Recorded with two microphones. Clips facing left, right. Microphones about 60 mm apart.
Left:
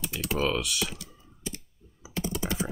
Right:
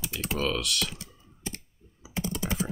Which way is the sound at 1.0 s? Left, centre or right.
Right.